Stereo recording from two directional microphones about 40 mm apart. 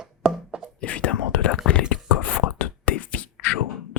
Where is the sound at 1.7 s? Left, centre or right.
Left.